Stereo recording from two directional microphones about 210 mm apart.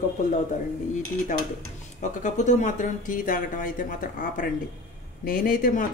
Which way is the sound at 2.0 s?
35° left (ahead or behind).